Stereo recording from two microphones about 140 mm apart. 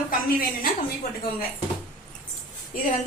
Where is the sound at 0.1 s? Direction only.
90° left.